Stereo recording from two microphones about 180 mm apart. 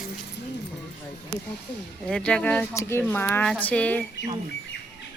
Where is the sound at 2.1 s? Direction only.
5° left (ahead or behind).